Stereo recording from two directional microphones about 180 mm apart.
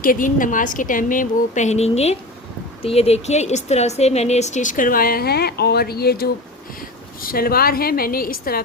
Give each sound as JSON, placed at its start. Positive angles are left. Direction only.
{"t": 0.0, "sound": "a woman's voice", "side_deg": 50}